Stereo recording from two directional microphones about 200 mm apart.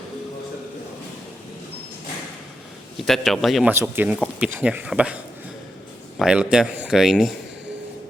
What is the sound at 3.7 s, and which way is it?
A man's voice, 10° right (ahead or behind).